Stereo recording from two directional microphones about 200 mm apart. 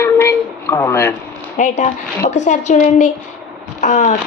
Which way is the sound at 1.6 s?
35° left (ahead or behind).